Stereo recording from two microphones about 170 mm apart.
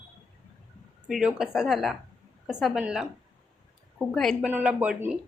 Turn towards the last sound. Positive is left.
turn(degrees=-10)  # may be behind; listen again after turning